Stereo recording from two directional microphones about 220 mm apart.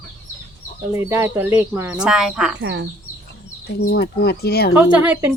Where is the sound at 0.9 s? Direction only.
10° right (ahead or behind).